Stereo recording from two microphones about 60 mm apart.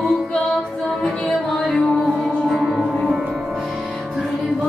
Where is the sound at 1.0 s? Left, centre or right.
Centre.